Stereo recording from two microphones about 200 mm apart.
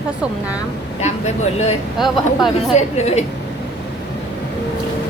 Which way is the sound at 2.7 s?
35° left (ahead or behind).